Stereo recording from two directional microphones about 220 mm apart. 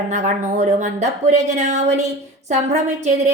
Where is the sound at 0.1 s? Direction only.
30° right (ahead or behind).